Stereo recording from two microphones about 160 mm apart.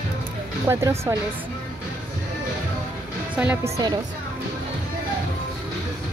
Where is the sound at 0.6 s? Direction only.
20° right (ahead or behind).